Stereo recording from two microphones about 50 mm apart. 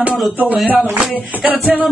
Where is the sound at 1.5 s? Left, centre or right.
Right.